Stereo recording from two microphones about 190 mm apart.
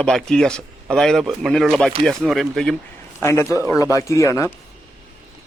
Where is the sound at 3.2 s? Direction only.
15° left (ahead or behind).